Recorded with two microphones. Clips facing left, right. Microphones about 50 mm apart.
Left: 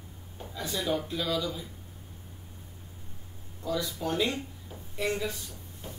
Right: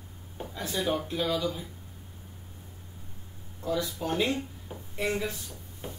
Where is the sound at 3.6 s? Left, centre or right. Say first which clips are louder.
Right 1 dB; right.